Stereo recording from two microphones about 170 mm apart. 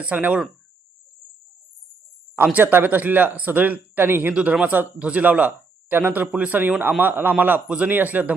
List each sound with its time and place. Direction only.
0.0 s speech: 10° right (ahead or behind)
2.3 s speech: 10° right (ahead or behind)